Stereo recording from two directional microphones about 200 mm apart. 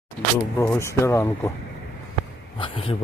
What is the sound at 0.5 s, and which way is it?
Speech, 15° left (ahead or behind).